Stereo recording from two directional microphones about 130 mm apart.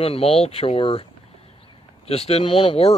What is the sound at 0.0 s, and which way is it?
Speech, 45° left (ahead or behind).